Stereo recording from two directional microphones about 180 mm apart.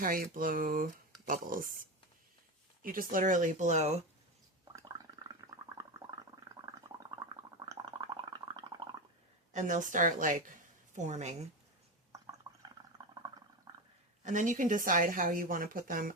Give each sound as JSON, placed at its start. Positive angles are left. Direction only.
{"t": 0.0, "sound": "speech", "side_deg": -50}
{"t": 2.8, "sound": "speech", "side_deg": -50}
{"t": 4.7, "sound": "gargling", "side_deg": -20}
{"t": 9.5, "sound": "a woman's voice", "side_deg": -45}
{"t": 12.1, "sound": "gargling", "side_deg": -20}
{"t": 13.7, "sound": "a sound", "side_deg": -20}
{"t": 14.3, "sound": "speech", "side_deg": -45}